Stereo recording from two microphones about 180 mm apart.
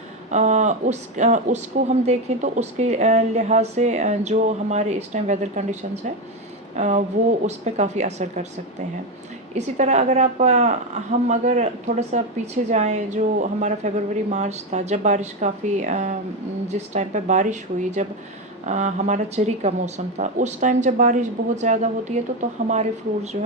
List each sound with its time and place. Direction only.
0.3 s speech: 40° right (ahead or behind)
6.7 s speech: 40° right (ahead or behind)
9.6 s speech: 40° right (ahead or behind)